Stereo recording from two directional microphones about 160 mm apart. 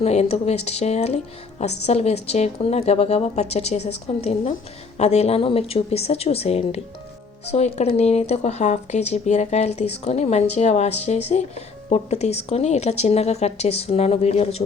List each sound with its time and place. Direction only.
0.0 s speech: 40° left (ahead or behind)